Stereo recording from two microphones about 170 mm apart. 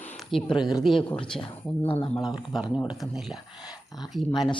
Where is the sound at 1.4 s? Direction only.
30° left (ahead or behind).